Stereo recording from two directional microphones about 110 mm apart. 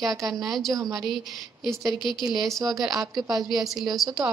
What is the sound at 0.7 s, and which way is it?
Speech, 35° right (ahead or behind).